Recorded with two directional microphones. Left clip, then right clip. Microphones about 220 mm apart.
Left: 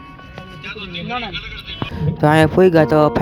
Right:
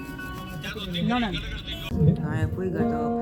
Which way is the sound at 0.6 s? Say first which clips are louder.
Left 4 dB; 40° right (ahead or behind).